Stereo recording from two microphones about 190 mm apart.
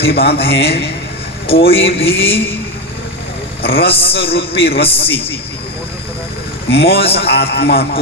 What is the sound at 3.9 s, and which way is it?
A man's voice, 30° left (ahead or behind).